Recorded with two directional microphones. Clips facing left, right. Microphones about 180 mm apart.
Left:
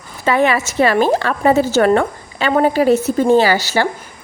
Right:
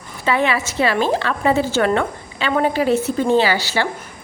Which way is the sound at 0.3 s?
45° left (ahead or behind).